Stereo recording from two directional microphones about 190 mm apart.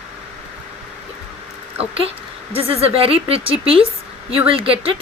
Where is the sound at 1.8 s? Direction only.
30° right (ahead or behind).